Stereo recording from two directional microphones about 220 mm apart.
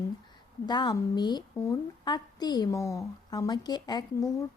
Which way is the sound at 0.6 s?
20° left (ahead or behind).